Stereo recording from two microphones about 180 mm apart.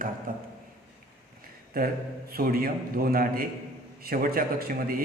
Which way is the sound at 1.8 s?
55° right (ahead or behind).